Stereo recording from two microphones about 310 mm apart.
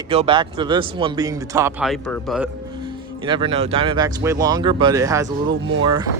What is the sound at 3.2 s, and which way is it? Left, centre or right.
Speech, centre.